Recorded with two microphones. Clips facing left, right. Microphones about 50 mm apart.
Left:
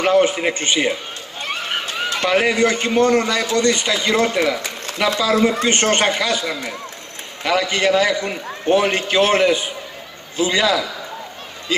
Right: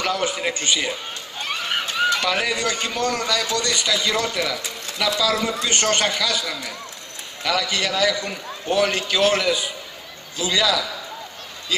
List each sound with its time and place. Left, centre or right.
0.0 s a man's voice: left
2.1 s a man's voice: left